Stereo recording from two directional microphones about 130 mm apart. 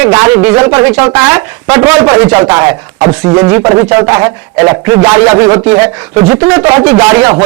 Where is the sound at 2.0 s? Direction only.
30° right (ahead or behind).